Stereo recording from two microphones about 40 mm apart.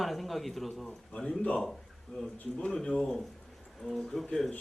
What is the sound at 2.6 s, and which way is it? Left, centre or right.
Speech, left.